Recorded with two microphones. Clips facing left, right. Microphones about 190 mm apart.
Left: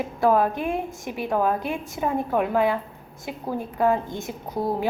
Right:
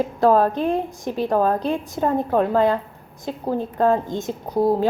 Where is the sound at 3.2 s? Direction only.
20° right (ahead or behind).